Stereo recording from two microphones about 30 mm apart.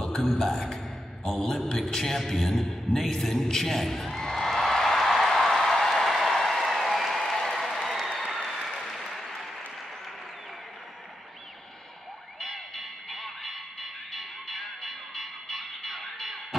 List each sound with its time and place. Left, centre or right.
0.2 s a man's voice: centre
3.4 s a sound: centre
7.5 s applause: centre
8.3 s applause: centre
8.6 s applause: centre
12.4 s music: centre